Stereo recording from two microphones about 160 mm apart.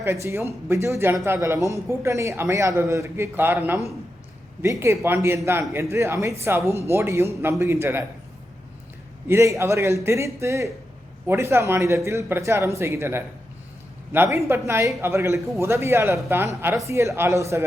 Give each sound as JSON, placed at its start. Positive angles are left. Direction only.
{"t": 0.0, "sound": "speech", "side_deg": -20}
{"t": 9.2, "sound": "speech", "side_deg": -15}